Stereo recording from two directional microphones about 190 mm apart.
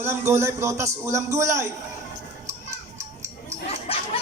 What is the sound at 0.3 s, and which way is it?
Music, 15° right (ahead or behind).